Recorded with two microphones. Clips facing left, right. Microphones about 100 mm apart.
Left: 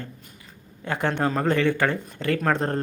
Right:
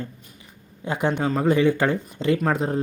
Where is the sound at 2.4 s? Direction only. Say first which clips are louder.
Right 1 dB; 5° right (ahead or behind).